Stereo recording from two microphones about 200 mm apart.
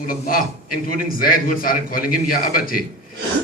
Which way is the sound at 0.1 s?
45° left (ahead or behind).